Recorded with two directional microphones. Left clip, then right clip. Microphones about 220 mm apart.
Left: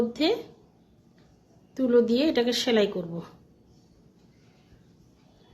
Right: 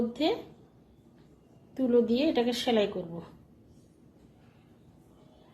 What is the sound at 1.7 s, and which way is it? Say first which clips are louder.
A woman's voice: left 4 dB; 25° left (ahead or behind).